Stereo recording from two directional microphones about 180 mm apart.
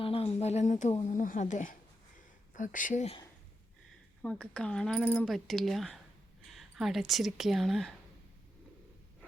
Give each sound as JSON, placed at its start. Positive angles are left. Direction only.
{"t": 0.0, "sound": "speech", "side_deg": 30}
{"t": 4.2, "sound": "speech", "side_deg": 5}